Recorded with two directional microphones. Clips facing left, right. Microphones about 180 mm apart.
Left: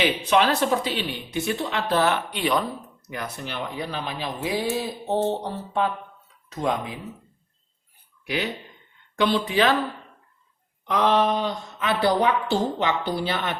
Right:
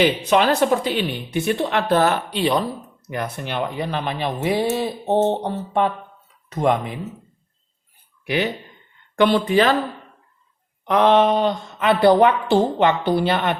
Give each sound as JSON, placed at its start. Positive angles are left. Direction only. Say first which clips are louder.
{"t": 0.0, "sound": "speech", "louder": "right 4 dB", "side_deg": -45}
{"t": 2.3, "sound": "speech", "louder": "right 4 dB", "side_deg": -30}
{"t": 3.1, "sound": "speech", "louder": "right 6 dB", "side_deg": -55}
{"t": 8.2, "sound": "speech", "louder": "right 5 dB", "side_deg": -60}
{"t": 10.8, "sound": "speech", "louder": "right 5 dB", "side_deg": -65}